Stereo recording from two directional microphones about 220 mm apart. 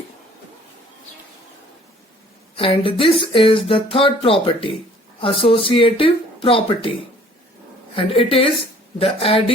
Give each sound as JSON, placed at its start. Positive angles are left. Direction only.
{"t": 2.6, "sound": "speech", "side_deg": 25}
{"t": 7.9, "sound": "speech", "side_deg": 25}